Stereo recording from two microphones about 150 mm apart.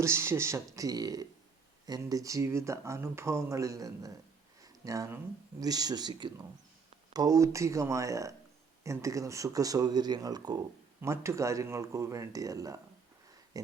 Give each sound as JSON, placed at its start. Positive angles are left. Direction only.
{"t": 0.0, "sound": "speech", "side_deg": -15}